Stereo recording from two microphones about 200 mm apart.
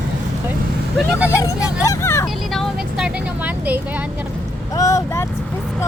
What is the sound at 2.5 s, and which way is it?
Vehicle, centre (ahead or behind).